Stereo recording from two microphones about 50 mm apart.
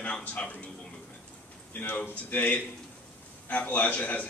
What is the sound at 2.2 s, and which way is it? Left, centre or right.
Speech, left.